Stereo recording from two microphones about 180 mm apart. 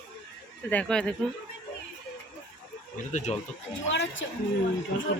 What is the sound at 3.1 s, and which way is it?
Speech, 40° left (ahead or behind).